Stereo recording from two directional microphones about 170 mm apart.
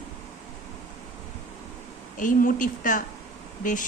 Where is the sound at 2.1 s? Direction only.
50° left (ahead or behind).